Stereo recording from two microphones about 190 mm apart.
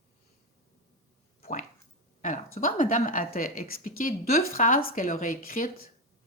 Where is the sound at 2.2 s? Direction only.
40° left (ahead or behind).